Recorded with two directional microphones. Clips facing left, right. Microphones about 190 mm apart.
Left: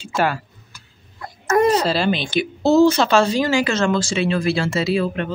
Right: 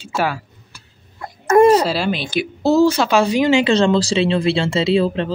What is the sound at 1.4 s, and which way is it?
Speech, 30° right (ahead or behind).